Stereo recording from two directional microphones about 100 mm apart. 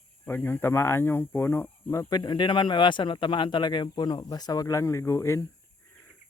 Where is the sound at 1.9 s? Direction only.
30° left (ahead or behind).